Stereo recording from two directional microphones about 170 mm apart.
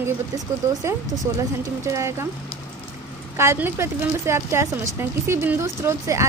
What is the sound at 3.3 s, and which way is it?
A woman's voice, 15° right (ahead or behind).